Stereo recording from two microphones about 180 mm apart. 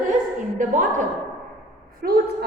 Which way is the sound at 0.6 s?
45° right (ahead or behind).